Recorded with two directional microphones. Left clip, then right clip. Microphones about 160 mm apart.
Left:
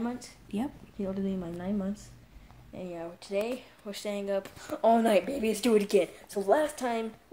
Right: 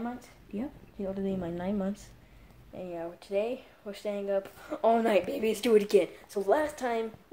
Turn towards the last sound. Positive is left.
turn(degrees=0)  # may be behind; listen again after turning